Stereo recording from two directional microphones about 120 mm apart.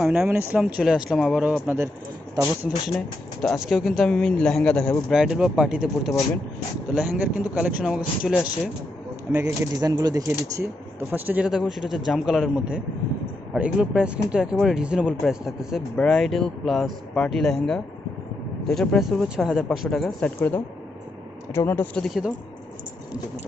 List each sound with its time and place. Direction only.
0.0 s speech: 5° right (ahead or behind)
1.6 s speech: 15° right (ahead or behind)
2.4 s speech: 5° right (ahead or behind)
5.1 s speech: 5° right (ahead or behind)
9.8 s speech: 35° right (ahead or behind)
11.1 s speech: 15° right (ahead or behind)
11.5 s speech: centre (ahead or behind)
21.5 s speech: 20° left (ahead or behind)
21.9 s speech: 5° left (ahead or behind)